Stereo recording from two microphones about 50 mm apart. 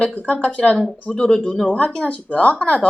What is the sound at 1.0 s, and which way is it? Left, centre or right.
A woman's voice, centre.